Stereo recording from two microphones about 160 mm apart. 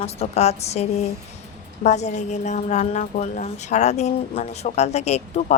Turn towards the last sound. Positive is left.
turn(degrees=45)  # may be behind; listen again after turning